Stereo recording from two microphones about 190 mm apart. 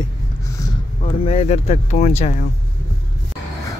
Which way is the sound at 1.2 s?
35° left (ahead or behind).